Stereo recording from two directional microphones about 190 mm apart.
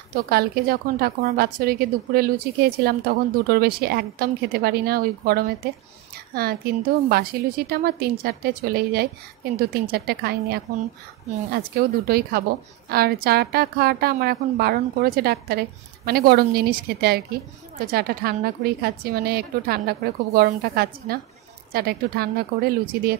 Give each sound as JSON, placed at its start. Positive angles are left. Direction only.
{"t": 0.1, "sound": "a woman's voice", "side_deg": -55}